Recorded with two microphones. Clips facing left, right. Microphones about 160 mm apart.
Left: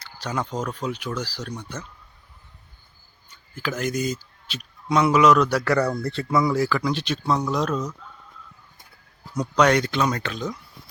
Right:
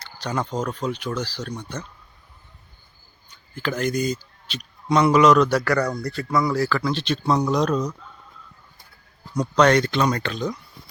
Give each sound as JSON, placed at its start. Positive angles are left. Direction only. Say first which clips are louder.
{"t": 0.0, "sound": "speech", "louder": "right 2 dB", "side_deg": 5}
{"t": 3.2, "sound": "speech", "louder": "right 2 dB", "side_deg": 5}
{"t": 6.0, "sound": "speech", "louder": "left 1 dB", "side_deg": 25}
{"t": 9.4, "sound": "speech", "louder": "right 2 dB", "side_deg": 10}